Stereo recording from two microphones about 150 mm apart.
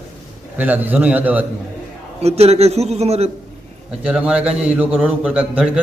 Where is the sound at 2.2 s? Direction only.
45° right (ahead or behind).